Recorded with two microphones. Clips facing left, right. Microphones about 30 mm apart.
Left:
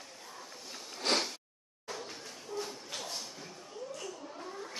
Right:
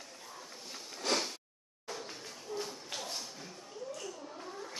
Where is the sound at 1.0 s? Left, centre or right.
Left.